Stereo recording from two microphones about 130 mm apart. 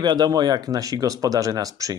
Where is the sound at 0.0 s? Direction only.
30° right (ahead or behind).